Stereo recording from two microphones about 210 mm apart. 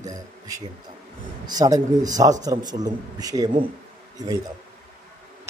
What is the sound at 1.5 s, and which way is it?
A man's voice, 15° right (ahead or behind).